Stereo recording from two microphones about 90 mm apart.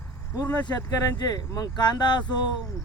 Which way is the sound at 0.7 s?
45° left (ahead or behind).